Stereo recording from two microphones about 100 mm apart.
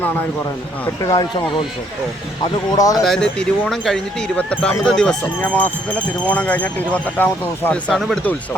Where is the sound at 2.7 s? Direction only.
40° left (ahead or behind).